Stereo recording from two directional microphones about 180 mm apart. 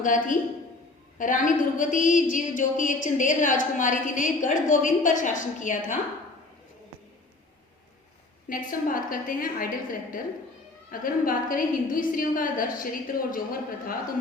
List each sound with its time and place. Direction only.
0.0 s a woman's voice: 45° left (ahead or behind)
8.4 s a woman's voice: 50° left (ahead or behind)